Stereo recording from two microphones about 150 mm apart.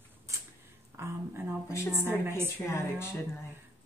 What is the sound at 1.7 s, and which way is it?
Speech, 20° left (ahead or behind).